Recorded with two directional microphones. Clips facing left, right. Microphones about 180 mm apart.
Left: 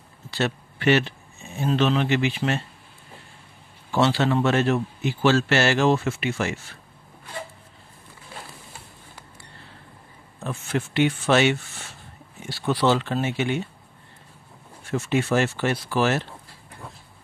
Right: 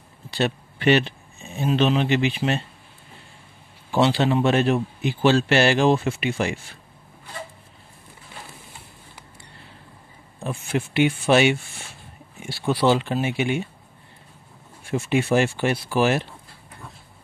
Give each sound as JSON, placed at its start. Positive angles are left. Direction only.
{"t": 0.3, "sound": "speech", "side_deg": -15}
{"t": 3.9, "sound": "a man's voice", "side_deg": -15}
{"t": 10.4, "sound": "a man's voice", "side_deg": -15}
{"t": 14.9, "sound": "a man's voice", "side_deg": -15}